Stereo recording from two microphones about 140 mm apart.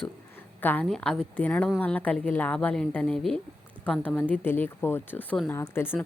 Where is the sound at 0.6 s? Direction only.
10° left (ahead or behind).